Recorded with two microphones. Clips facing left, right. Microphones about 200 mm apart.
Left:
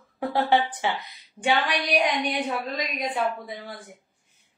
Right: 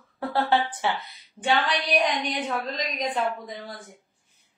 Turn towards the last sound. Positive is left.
turn(degrees=10)  # may be behind; listen again after turning